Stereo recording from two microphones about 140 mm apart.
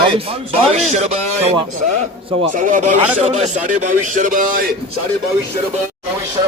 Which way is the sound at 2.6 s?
65° right (ahead or behind).